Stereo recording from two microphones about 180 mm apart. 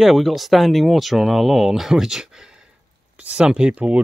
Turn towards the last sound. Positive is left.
turn(degrees=-5)  # may be behind; listen again after turning